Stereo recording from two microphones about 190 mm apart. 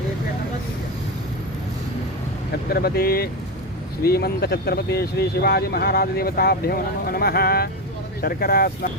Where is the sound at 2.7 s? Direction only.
55° left (ahead or behind).